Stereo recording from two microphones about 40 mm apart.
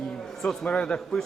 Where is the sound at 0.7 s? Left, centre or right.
Left.